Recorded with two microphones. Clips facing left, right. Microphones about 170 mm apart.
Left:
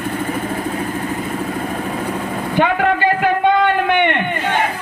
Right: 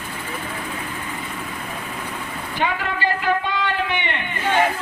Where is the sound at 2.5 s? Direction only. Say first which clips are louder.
Left 9 dB; 55° left (ahead or behind).